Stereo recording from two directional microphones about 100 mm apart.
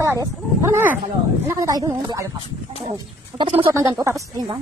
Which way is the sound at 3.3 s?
60° right (ahead or behind).